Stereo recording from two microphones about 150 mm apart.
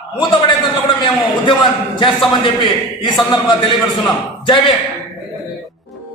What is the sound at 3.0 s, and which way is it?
Speech, 30° left (ahead or behind).